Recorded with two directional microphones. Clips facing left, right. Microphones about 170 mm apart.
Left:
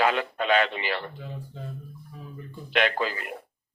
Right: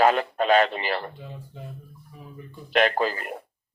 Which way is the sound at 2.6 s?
40° right (ahead or behind).